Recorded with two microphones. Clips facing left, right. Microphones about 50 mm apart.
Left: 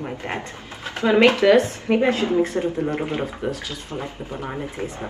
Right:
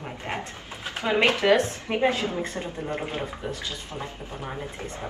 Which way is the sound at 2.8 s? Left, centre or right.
Left.